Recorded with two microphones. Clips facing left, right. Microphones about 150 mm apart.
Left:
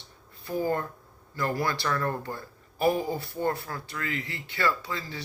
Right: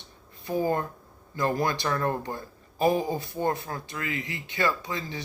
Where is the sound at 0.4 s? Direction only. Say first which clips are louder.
Right 2 dB; 20° right (ahead or behind).